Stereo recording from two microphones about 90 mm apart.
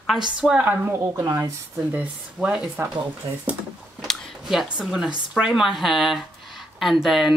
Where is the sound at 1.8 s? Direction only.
15° right (ahead or behind).